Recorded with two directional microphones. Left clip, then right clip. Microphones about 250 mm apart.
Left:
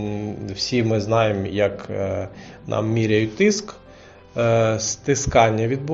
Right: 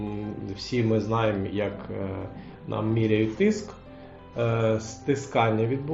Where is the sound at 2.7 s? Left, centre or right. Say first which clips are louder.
Left 5 dB; left.